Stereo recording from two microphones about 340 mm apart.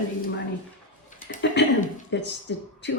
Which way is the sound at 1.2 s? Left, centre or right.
Left.